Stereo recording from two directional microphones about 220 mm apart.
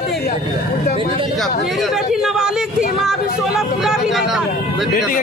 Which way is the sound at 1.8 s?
Centre (ahead or behind).